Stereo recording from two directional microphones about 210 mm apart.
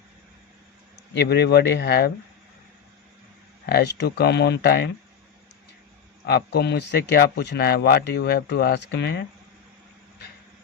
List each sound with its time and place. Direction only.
1.1 s speech: 50° left (ahead or behind)
3.7 s speech: 50° left (ahead or behind)
6.2 s speech: 50° left (ahead or behind)